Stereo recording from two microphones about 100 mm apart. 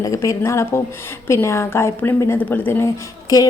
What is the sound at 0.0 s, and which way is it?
A woman's voice, 30° left (ahead or behind).